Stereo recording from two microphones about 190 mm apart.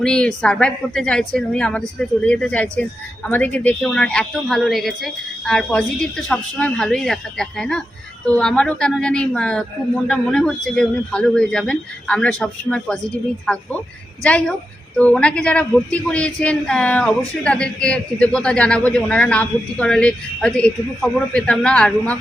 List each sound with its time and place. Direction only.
0.0 s a woman's voice: 5° left (ahead or behind)